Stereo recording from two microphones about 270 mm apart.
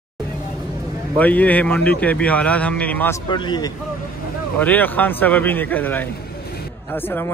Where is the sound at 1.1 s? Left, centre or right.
Centre.